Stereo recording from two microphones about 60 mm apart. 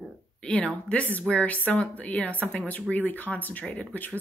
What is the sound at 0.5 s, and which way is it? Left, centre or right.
A woman's voice, left.